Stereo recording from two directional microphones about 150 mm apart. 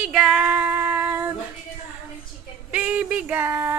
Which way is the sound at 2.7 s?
10° right (ahead or behind).